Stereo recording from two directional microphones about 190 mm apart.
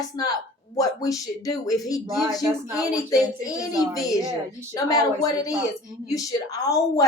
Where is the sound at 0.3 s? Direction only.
20° left (ahead or behind).